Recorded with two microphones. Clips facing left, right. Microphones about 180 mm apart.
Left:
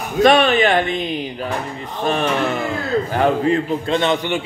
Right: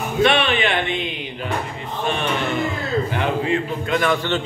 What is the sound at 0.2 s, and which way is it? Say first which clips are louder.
A man's voice: left 5 dB; 40° left (ahead or behind).